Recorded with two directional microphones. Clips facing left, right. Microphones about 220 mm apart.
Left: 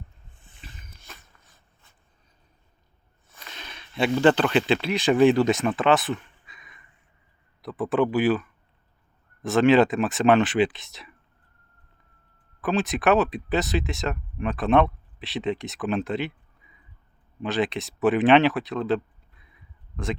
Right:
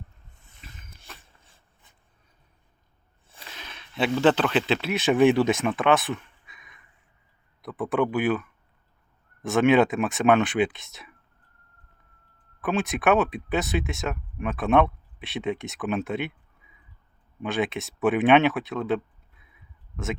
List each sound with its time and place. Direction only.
0.4 s dog: 30° left (ahead or behind)
1.2 s a sound: 30° right (ahead or behind)
3.2 s a sound: 30° right (ahead or behind)
3.5 s speech: 5° right (ahead or behind)
12.6 s speech: centre (ahead or behind)
17.4 s speech: centre (ahead or behind)